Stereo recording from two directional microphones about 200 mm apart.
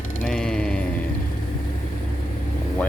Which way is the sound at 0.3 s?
5° left (ahead or behind).